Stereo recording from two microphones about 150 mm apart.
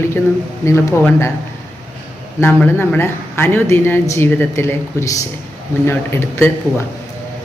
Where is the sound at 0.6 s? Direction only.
20° left (ahead or behind).